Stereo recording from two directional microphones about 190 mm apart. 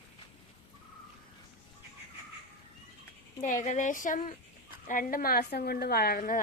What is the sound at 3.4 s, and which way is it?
A woman's voice, 40° left (ahead or behind).